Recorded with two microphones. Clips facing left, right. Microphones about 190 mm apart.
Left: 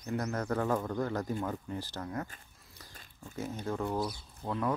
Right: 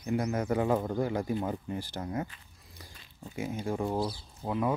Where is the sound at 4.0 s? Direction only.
30° right (ahead or behind).